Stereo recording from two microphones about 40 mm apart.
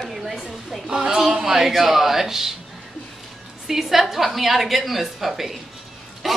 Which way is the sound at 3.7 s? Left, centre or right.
Centre.